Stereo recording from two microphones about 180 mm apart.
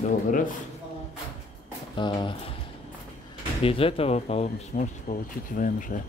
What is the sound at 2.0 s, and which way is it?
Speech, 25° left (ahead or behind).